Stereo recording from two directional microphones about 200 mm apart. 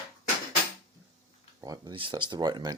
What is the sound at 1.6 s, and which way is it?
Speech, 20° right (ahead or behind).